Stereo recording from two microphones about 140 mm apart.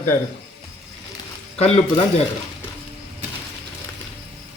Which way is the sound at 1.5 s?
50° left (ahead or behind).